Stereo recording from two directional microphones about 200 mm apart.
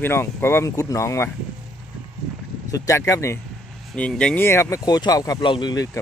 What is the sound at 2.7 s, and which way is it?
Speech, 15° left (ahead or behind).